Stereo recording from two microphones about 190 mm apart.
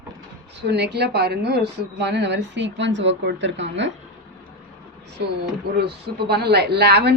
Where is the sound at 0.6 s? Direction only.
60° right (ahead or behind).